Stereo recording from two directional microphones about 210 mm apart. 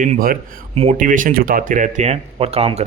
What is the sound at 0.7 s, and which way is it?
A man's voice, 30° right (ahead or behind).